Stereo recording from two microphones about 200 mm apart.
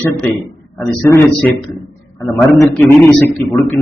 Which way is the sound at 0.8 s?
15° left (ahead or behind).